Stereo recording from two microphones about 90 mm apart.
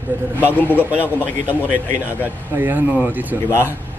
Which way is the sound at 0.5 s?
20° left (ahead or behind).